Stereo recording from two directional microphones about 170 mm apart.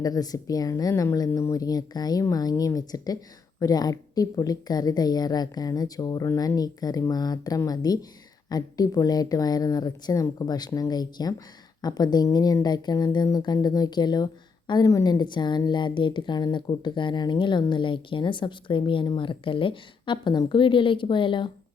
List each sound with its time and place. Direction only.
0.0 s a woman's voice: 20° left (ahead or behind)